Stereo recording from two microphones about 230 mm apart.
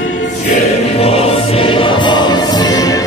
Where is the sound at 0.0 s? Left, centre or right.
Left.